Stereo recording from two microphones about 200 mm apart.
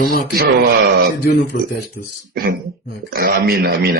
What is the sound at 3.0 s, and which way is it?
Speech, 50° right (ahead or behind).